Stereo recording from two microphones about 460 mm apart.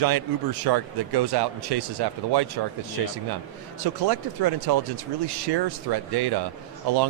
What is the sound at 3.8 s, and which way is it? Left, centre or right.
Speech, right.